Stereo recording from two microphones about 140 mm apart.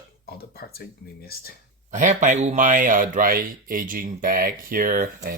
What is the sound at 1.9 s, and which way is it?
Speech, 60° right (ahead or behind).